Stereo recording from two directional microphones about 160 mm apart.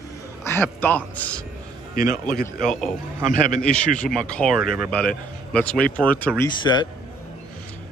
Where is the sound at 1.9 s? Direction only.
60° left (ahead or behind).